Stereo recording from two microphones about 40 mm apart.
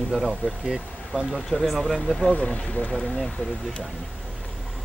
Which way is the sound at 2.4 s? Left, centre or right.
Left.